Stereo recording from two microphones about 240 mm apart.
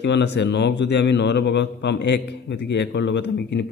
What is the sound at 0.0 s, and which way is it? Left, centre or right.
A man's voice, left.